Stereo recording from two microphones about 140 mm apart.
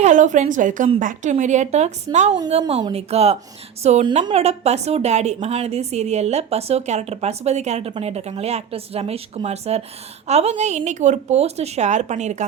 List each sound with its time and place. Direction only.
0.0 s a woman's voice: 60° right (ahead or behind)